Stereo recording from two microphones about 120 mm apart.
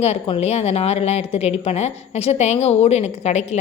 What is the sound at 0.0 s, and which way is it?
A woman's voice, 60° left (ahead or behind).